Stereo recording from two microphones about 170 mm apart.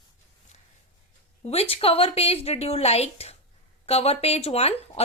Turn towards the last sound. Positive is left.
turn(degrees=35)  # may be behind; listen again after turning